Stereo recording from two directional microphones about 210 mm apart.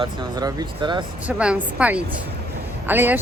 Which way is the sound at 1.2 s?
5° right (ahead or behind).